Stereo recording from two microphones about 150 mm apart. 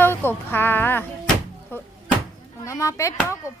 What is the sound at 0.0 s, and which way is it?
Music, 15° left (ahead or behind).